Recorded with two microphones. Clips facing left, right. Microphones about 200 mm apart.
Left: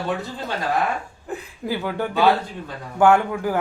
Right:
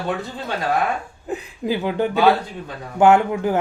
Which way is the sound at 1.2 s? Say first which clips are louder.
Right 5 dB; 20° right (ahead or behind).